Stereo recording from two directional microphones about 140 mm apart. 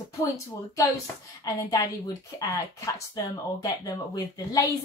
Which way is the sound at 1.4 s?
25° left (ahead or behind).